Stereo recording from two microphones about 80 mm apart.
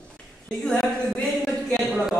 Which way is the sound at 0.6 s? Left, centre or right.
Centre.